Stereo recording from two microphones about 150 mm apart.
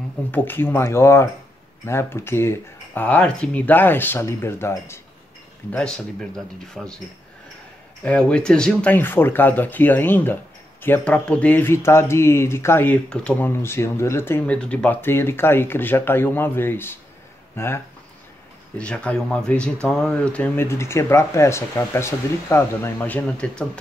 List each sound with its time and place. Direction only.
0.3 s speech: 15° left (ahead or behind)
8.0 s speech: 10° left (ahead or behind)